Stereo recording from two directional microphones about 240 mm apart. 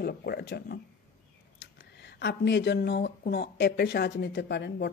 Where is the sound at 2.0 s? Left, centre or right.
Left.